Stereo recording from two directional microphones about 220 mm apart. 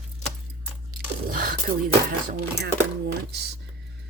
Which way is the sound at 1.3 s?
40° right (ahead or behind).